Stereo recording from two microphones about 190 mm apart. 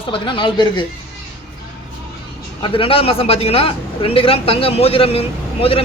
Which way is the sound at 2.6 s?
30° left (ahead or behind).